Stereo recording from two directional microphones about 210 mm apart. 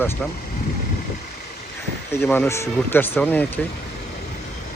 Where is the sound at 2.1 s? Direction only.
10° left (ahead or behind).